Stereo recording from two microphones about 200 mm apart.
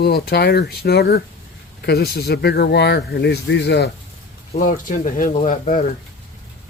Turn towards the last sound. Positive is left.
turn(degrees=40)  # may be behind; listen again after turning